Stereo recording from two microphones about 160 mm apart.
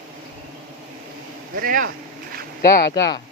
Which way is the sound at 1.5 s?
65° right (ahead or behind).